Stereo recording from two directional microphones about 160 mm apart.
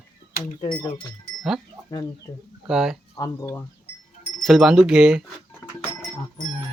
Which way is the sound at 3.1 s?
20° left (ahead or behind).